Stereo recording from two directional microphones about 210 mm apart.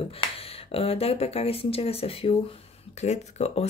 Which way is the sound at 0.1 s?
30° left (ahead or behind).